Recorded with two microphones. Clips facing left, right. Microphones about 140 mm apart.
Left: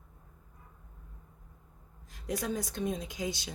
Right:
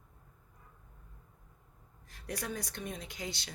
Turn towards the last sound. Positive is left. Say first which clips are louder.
# left 6 dB
turn(degrees=20)  # may be behind; listen again after turning